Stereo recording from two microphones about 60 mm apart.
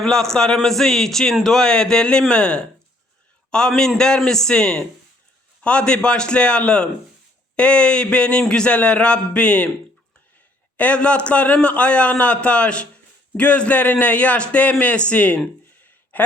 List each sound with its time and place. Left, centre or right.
0.0 s a man's voice: centre
10.8 s a man's voice: left
16.1 s a sound: left